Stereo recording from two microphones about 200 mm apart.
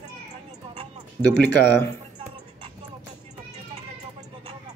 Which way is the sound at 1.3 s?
10° left (ahead or behind).